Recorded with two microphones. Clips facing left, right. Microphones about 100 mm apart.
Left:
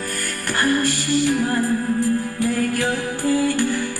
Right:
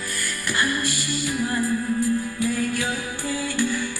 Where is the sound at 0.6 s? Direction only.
45° left (ahead or behind).